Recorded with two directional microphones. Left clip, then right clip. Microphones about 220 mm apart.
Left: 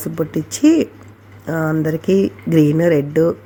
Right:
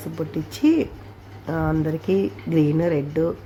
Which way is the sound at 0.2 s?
20° left (ahead or behind).